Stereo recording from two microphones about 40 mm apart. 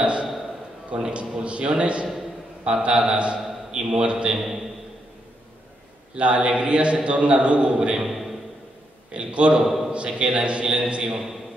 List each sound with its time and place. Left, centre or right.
0.0 s a sound: right
1.1 s a man's voice: right
6.1 s a man's voice: right
8.0 s a sound: centre
9.1 s a man's voice: right
9.6 s a man's voice: centre
9.9 s a man's voice: right